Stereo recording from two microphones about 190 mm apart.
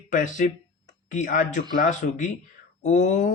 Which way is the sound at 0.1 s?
40° left (ahead or behind).